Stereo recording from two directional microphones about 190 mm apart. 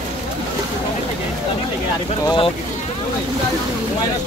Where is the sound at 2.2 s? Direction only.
25° left (ahead or behind).